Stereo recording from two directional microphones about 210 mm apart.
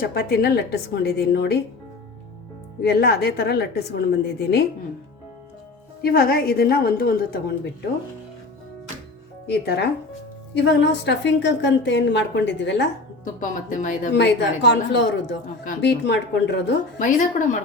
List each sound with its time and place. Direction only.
0.0 s a woman's voice: 45° left (ahead or behind)
2.8 s a woman's voice: 50° left (ahead or behind)
6.0 s a woman's voice: 45° left (ahead or behind)
9.5 s a woman's voice: 50° left (ahead or behind)
13.2 s speech: 40° left (ahead or behind)
14.2 s a woman's voice: 55° left (ahead or behind)
17.0 s speech: 35° left (ahead or behind)